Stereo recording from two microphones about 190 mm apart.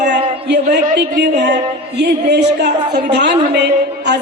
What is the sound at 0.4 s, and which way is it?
Music, 60° right (ahead or behind).